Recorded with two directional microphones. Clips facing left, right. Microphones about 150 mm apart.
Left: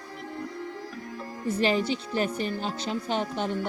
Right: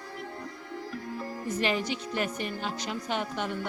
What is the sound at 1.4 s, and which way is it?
A woman's voice, 30° left (ahead or behind).